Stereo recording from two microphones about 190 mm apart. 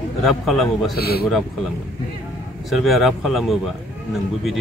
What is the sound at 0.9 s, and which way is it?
Speech, 55° left (ahead or behind).